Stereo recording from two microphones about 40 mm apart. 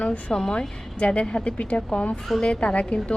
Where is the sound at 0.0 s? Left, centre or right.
Left.